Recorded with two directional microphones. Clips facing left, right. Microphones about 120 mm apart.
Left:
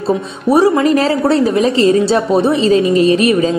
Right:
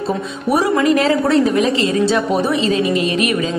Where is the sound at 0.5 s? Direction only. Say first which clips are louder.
Left 4 dB; 30° left (ahead or behind).